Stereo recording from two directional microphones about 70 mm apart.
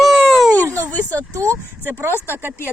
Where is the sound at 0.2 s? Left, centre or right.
Centre.